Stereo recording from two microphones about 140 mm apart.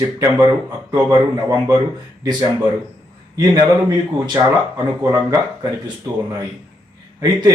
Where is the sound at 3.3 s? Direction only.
30° right (ahead or behind).